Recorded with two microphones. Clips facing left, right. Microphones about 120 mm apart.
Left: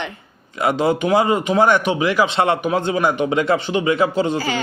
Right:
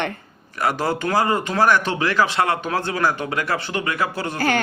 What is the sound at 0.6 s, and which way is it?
A man's voice, 20° left (ahead or behind).